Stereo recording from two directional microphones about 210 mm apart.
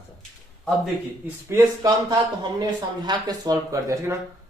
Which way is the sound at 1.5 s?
15° right (ahead or behind).